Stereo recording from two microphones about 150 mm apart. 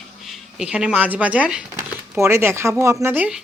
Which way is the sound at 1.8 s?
20° right (ahead or behind).